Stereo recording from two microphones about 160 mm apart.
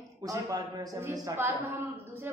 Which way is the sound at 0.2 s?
20° right (ahead or behind).